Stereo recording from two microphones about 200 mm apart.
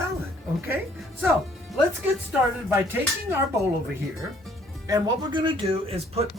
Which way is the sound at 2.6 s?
10° right (ahead or behind).